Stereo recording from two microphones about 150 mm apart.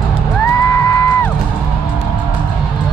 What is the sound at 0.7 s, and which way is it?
Music, 15° left (ahead or behind).